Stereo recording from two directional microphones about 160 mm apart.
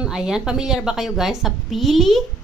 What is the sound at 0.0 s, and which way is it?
A woman's voice, 5° right (ahead or behind).